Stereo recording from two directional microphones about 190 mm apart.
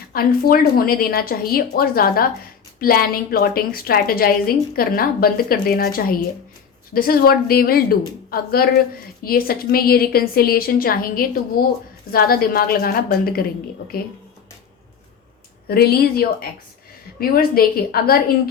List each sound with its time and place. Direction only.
0.1 s a woman's voice: 50° left (ahead or behind)
15.6 s a woman's voice: 55° left (ahead or behind)